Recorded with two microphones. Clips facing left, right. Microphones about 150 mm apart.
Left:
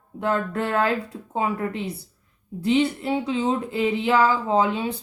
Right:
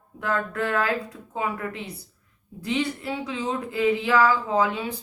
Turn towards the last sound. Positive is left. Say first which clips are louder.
# left 3 dB
turn(degrees=25)  # may be behind; listen again after turning